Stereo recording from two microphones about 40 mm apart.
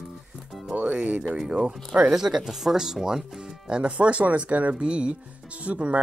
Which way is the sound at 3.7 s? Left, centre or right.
Right.